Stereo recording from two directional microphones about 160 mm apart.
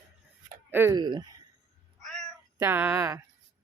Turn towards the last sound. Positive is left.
turn(degrees=-15)  # may be behind; listen again after turning